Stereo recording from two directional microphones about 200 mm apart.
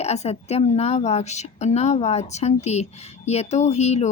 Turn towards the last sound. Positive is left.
turn(degrees=35)  # may be behind; listen again after turning